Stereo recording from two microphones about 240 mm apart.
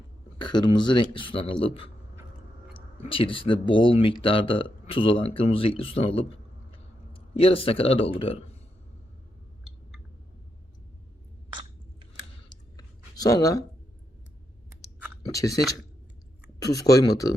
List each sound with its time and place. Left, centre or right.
0.3 s speech: centre
3.0 s speech: left
12.5 s clicking: centre
15.2 s speech: centre